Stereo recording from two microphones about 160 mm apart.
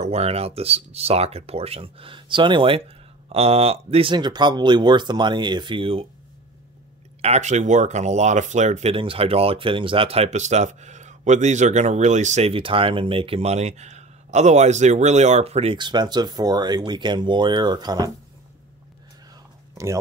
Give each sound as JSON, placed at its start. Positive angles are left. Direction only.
{"t": 0.0, "sound": "speech", "side_deg": -40}
{"t": 7.2, "sound": "speech", "side_deg": -45}
{"t": 19.7, "sound": "a sound", "side_deg": -20}